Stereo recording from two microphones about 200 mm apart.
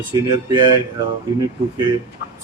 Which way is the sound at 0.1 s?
20° right (ahead or behind).